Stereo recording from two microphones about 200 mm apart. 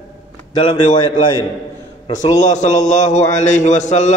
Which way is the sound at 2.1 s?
35° left (ahead or behind).